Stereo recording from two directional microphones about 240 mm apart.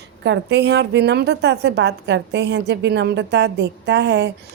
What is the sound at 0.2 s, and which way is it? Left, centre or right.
A woman's voice, right.